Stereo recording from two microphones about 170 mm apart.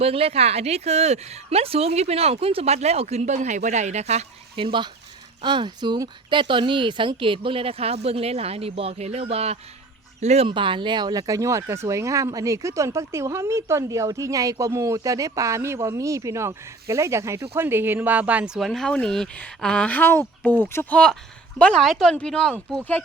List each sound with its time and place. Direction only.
0.0 s a woman's voice: 35° right (ahead or behind); by 22.5 s 5° left (ahead or behind)